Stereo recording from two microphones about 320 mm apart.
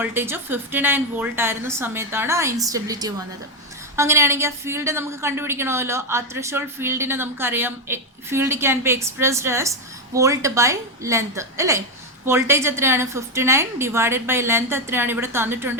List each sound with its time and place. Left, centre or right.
0.0 s a woman's voice: centre